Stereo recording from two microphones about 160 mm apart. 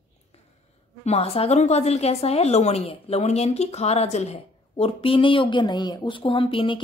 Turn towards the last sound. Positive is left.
turn(degrees=35)  # may be behind; listen again after turning